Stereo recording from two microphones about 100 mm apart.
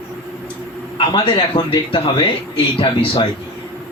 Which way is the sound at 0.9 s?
55° left (ahead or behind).